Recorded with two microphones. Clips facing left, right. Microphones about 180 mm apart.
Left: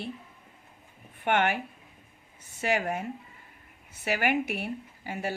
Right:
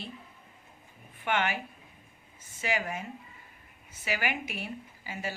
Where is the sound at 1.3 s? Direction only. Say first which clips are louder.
Left 4 dB; 55° left (ahead or behind).